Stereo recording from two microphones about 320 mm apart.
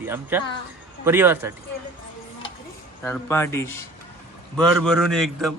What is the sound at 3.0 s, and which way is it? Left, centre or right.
A man's voice, centre.